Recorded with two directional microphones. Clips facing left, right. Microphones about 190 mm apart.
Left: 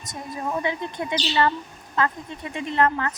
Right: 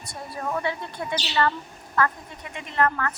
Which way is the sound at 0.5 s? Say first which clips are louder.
Left 1 dB; 15° left (ahead or behind).